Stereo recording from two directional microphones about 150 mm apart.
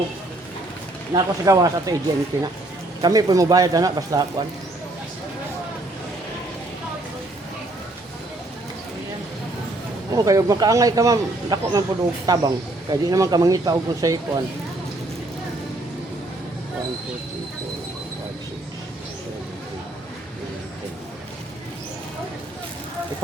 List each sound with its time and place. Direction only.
1.1 s speech: 25° right (ahead or behind)
10.1 s speech: 25° right (ahead or behind)